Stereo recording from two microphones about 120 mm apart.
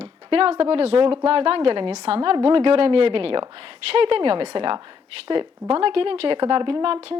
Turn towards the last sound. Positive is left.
turn(degrees=-55)  # may be behind; listen again after turning